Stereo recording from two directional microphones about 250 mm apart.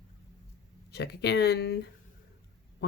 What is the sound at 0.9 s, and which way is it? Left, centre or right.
Speech, left.